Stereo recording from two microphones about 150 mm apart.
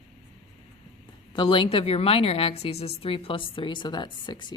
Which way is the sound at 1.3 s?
35° left (ahead or behind).